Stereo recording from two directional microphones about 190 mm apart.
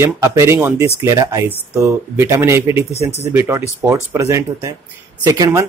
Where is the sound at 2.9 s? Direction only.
35° left (ahead or behind).